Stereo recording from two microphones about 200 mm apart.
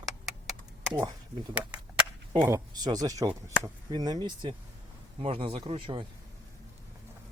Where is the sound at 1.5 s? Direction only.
5° right (ahead or behind).